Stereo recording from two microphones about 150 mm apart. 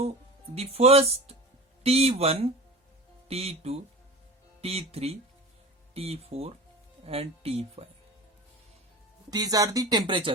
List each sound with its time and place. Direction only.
0.5 s speech: 45° right (ahead or behind)
9.3 s speech: 25° right (ahead or behind)